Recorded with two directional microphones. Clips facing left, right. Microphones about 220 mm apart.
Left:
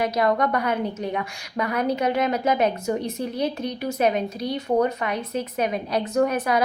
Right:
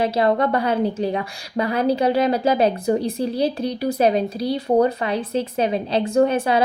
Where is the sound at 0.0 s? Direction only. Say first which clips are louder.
Right 3 dB; 30° right (ahead or behind).